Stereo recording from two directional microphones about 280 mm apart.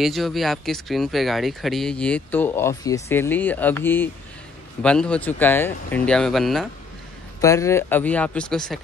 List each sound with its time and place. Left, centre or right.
0.0 s speech: centre